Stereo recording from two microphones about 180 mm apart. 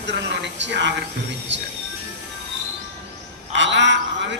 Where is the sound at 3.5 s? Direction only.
80° right.